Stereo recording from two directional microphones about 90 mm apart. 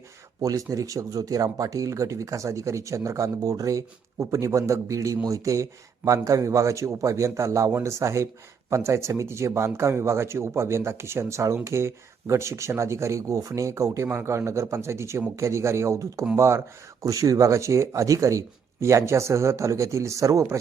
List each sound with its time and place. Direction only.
0.4 s speech: 40° right (ahead or behind)